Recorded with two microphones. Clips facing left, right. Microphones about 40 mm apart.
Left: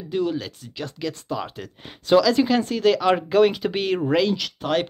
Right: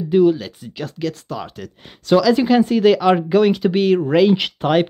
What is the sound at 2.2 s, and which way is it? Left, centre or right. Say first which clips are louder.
Speech: right 5 dB; centre.